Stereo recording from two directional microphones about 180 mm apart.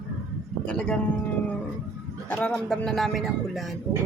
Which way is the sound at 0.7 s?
5° left (ahead or behind).